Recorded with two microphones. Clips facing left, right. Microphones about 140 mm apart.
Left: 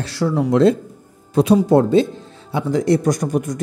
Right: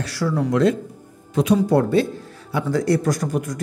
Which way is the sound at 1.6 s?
25° left (ahead or behind).